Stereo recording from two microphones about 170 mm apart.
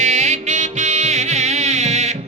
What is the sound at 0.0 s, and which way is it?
Music, 45° right (ahead or behind).